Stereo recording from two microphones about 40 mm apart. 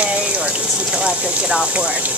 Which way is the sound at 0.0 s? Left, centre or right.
Right.